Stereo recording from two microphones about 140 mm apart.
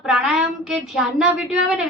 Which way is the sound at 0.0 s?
5° right (ahead or behind).